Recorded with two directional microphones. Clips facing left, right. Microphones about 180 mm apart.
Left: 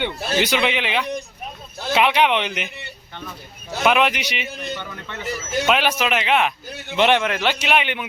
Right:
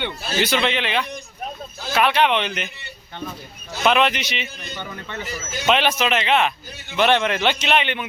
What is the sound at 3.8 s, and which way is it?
Speech, 10° left (ahead or behind).